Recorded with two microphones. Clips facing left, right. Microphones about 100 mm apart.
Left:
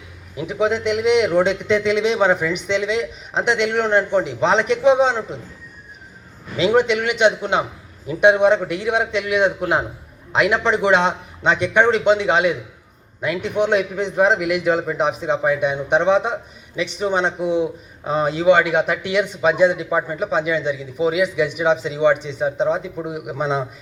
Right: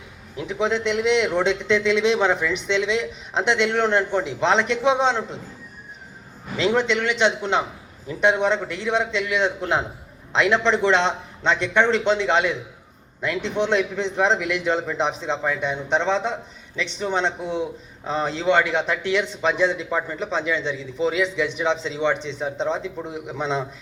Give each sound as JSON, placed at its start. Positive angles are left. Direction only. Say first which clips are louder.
{"t": 0.3, "sound": "a man's voice", "louder": "left 3 dB", "side_deg": 10}
{"t": 6.6, "sound": "a man's voice", "louder": "left 4 dB", "side_deg": 10}